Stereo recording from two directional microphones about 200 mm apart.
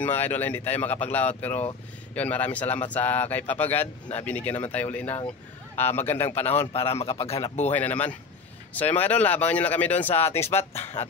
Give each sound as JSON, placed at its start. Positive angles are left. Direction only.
{"t": 0.0, "sound": "speech", "side_deg": 10}
{"t": 6.7, "sound": "speech", "side_deg": 30}
{"t": 7.7, "sound": "speech", "side_deg": 10}
{"t": 10.1, "sound": "speech", "side_deg": 30}
{"t": 10.5, "sound": "speech", "side_deg": 10}